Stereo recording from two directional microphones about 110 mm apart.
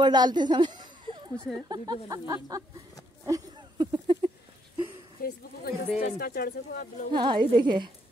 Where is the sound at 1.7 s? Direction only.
40° right (ahead or behind).